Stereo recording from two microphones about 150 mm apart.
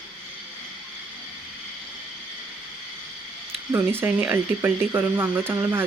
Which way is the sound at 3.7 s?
15° right (ahead or behind).